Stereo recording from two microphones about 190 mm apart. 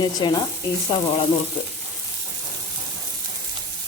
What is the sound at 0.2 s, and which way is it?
Sizzle, 25° left (ahead or behind).